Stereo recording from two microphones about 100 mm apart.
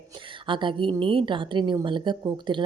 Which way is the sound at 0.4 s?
55° right (ahead or behind).